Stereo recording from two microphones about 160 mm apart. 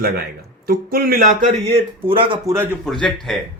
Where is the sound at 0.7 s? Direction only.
70° right (ahead or behind); by 2.4 s 35° right (ahead or behind).